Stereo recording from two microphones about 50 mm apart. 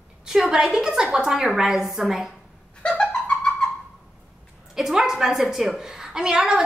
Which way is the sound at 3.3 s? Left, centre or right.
Centre.